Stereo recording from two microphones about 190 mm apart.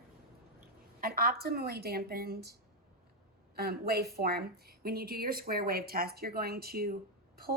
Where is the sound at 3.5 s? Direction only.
55° right (ahead or behind).